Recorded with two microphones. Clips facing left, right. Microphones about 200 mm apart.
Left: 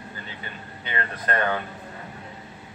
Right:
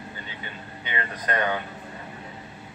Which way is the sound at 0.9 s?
15° right (ahead or behind).